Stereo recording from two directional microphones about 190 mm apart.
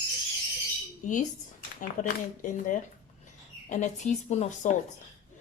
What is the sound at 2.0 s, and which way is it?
Speech, 40° left (ahead or behind).